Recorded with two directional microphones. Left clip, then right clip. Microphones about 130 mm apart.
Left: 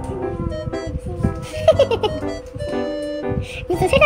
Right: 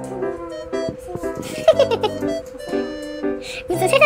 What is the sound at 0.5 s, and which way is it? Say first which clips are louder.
Music: right 2 dB; 25° right (ahead or behind).